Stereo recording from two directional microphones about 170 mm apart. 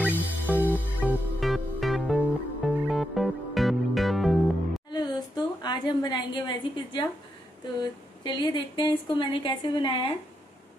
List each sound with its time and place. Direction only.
0.0 s music: 10° right (ahead or behind)
1.4 s music: centre (ahead or behind)
4.9 s a sound: 25° left (ahead or behind)
7.8 s a woman's voice: 25° left (ahead or behind)